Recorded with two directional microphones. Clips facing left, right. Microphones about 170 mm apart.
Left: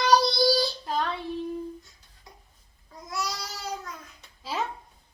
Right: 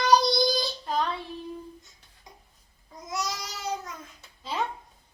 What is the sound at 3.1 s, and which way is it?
Babbling, 20° right (ahead or behind).